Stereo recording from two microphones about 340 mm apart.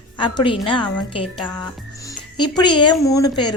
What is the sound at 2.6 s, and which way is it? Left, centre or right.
Speech, centre.